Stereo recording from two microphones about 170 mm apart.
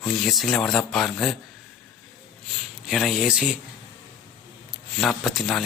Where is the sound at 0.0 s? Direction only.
Centre (ahead or behind).